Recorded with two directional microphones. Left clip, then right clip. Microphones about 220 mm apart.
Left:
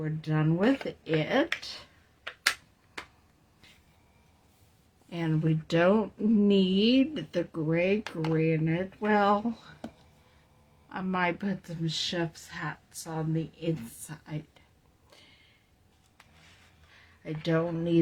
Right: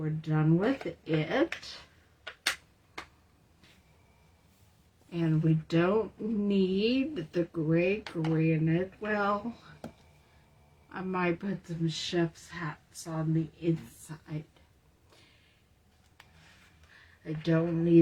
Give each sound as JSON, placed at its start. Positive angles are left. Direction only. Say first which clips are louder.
{"t": 0.0, "sound": "speech", "louder": "left 1 dB", "side_deg": 50}
{"t": 5.1, "sound": "speech", "louder": "even", "side_deg": 50}
{"t": 10.8, "sound": "speech", "louder": "left 2 dB", "side_deg": 50}
{"t": 17.2, "sound": "speech", "louder": "left 1 dB", "side_deg": 45}